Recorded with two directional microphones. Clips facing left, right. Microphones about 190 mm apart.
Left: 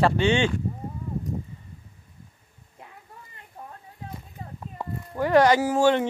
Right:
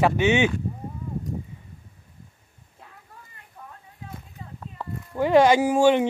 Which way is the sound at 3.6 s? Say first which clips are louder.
Left 3 dB; 30° left (ahead or behind).